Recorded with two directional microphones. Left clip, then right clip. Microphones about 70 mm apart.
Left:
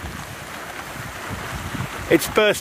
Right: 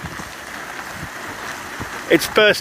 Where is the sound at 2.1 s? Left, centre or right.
Left.